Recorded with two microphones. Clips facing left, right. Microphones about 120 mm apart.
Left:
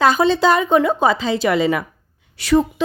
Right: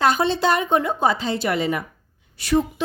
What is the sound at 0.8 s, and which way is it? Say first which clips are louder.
Speech: left 4 dB; 90° left.